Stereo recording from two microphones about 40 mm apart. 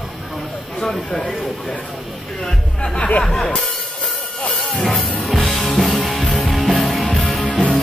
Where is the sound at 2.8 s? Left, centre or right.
Left.